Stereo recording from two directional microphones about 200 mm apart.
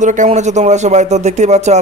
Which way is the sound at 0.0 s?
40° right (ahead or behind).